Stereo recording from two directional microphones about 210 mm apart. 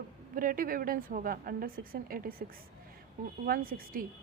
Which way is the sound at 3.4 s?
45° right (ahead or behind).